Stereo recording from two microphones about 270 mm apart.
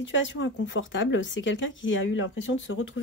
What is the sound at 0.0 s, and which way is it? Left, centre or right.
Speech, left.